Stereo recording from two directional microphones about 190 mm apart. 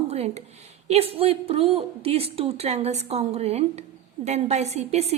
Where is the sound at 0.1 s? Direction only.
35° right (ahead or behind).